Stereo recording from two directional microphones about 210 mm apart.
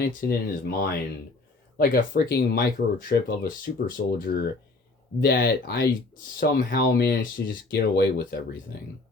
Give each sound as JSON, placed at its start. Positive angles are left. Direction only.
{"t": 0.0, "sound": "speech", "side_deg": 45}